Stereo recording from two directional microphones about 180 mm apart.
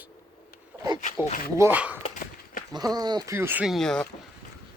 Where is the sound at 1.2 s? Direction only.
50° left (ahead or behind).